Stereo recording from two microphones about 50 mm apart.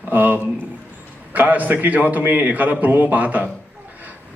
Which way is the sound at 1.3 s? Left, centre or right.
Right.